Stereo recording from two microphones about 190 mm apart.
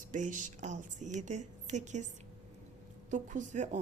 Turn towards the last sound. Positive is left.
turn(degrees=-40)  # may be behind; listen again after turning